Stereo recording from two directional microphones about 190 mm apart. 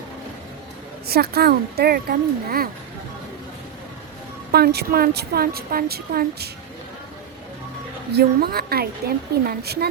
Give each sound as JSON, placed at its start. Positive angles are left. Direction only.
{"t": 1.0, "sound": "a woman's voice", "side_deg": -55}
{"t": 4.5, "sound": "a woman's voice", "side_deg": -55}
{"t": 8.1, "sound": "a woman's voice", "side_deg": -55}